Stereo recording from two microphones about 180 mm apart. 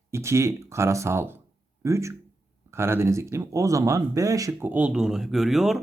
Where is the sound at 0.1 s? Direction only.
15° right (ahead or behind).